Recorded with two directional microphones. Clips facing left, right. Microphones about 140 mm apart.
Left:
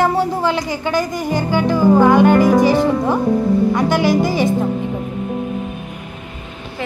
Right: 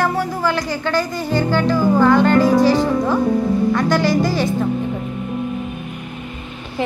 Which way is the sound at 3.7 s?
20° left (ahead or behind).